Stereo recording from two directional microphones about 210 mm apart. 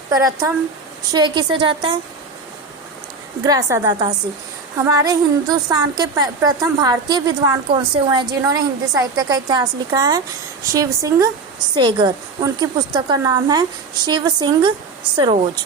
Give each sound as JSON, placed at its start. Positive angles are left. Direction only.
{"t": 0.1, "sound": "a woman's voice", "side_deg": -15}
{"t": 3.4, "sound": "a woman's voice", "side_deg": -20}